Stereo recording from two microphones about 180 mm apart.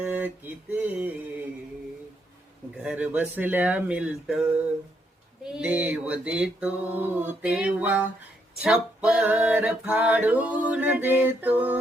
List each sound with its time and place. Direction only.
0.0 s music: 5° right (ahead or behind)
2.7 s music: 5° right (ahead or behind)
5.5 s music: 5° right (ahead or behind)